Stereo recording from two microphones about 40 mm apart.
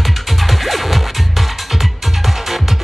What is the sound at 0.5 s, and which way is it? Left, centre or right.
Music, centre.